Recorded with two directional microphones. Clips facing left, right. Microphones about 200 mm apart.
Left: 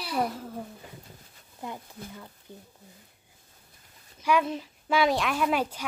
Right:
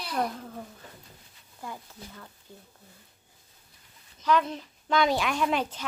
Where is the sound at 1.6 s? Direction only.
20° left (ahead or behind).